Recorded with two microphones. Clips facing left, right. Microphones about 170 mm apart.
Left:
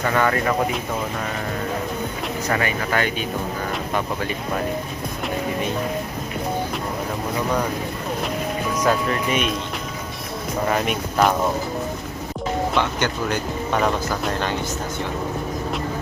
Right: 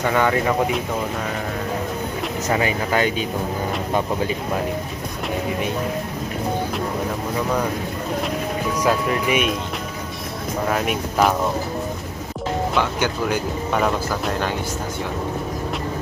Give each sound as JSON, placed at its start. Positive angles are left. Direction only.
{"t": 0.0, "sound": "speech", "side_deg": -10}
{"t": 2.5, "sound": "speech", "side_deg": -15}
{"t": 8.8, "sound": "speech", "side_deg": -10}
{"t": 10.7, "sound": "speech", "side_deg": 0}
{"t": 12.7, "sound": "speech", "side_deg": -5}